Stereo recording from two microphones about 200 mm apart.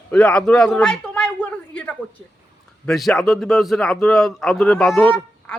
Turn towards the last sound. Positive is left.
turn(degrees=5)  # may be behind; listen again after turning